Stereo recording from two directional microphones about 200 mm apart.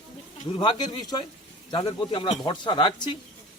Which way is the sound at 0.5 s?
20° left (ahead or behind).